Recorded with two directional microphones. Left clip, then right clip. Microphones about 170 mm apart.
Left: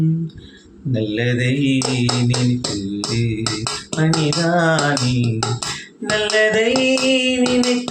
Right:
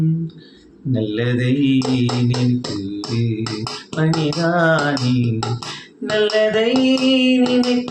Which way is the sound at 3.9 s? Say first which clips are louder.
Even; 35° left (ahead or behind).